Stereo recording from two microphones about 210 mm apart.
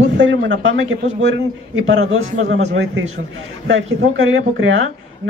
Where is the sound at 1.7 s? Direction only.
70° right (ahead or behind).